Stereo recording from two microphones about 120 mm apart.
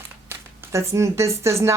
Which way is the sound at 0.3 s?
20° right (ahead or behind).